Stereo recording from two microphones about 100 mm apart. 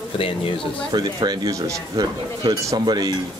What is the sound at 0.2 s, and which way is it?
Speech, 65° left (ahead or behind).